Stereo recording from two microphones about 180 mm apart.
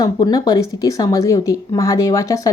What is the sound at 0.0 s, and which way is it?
A woman's voice, 20° left (ahead or behind).